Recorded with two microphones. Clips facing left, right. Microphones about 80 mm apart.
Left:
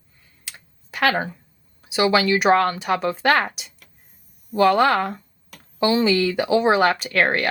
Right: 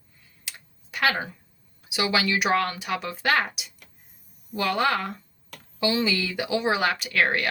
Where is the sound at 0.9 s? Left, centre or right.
Left.